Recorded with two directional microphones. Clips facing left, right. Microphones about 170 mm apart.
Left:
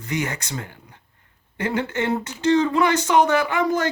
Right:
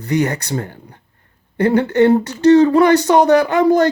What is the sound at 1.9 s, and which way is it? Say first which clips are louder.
Speech: right 12 dB; 35° right (ahead or behind).